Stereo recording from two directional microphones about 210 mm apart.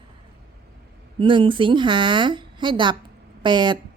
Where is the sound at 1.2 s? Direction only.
25° right (ahead or behind).